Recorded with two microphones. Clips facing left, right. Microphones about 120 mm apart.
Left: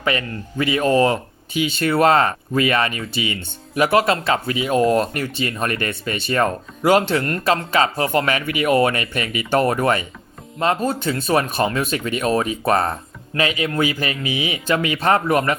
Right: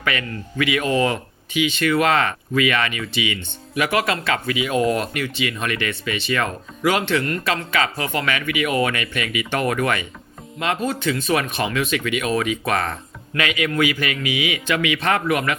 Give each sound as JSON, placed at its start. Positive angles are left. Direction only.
{"t": 0.0, "sound": "speech", "side_deg": 35}